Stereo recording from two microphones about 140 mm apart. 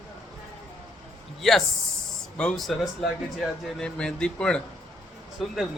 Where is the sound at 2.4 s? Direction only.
5° left (ahead or behind).